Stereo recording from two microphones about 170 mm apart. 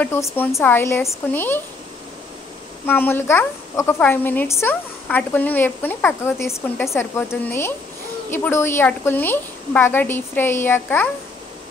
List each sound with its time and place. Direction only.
0.0 s a woman's voice: 10° left (ahead or behind)
2.9 s a woman's voice: 10° left (ahead or behind)